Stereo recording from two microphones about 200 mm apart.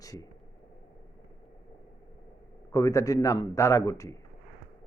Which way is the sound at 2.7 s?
15° left (ahead or behind).